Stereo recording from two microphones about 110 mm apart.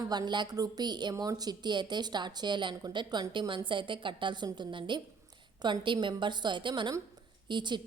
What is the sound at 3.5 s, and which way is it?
A woman's voice, 50° right (ahead or behind).